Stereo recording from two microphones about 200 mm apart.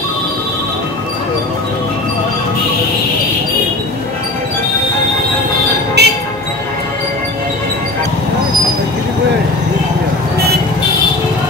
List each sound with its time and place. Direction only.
6.0 s music: 55° right (ahead or behind)